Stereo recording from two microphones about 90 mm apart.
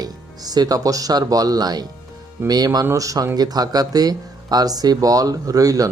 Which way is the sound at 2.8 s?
35° right (ahead or behind).